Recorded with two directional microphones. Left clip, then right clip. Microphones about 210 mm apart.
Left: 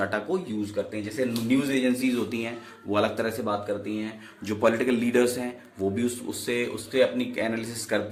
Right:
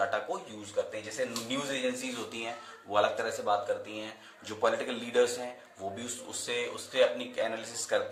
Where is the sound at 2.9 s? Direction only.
45° left (ahead or behind).